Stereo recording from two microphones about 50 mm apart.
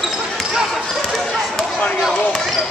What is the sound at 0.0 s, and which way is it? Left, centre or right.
Basketball bounce, centre.